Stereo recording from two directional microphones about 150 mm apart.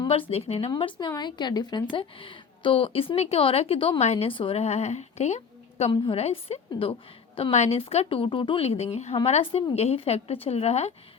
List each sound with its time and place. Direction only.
0.1 s a woman's voice: 40° left (ahead or behind)
0.9 s a woman's voice: 30° left (ahead or behind); by 10.9 s 45° left (ahead or behind)